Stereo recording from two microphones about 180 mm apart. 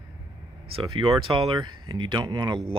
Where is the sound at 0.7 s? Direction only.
30° right (ahead or behind).